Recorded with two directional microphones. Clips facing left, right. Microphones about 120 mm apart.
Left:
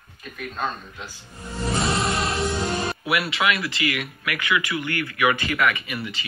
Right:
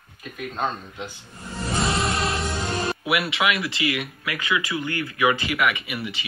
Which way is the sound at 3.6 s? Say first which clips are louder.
Right 1 dB; 20° right (ahead or behind).